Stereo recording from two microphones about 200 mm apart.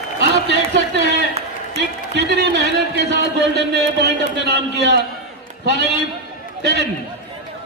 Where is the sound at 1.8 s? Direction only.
55° right (ahead or behind).